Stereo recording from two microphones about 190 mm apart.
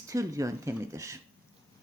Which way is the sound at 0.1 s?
15° right (ahead or behind).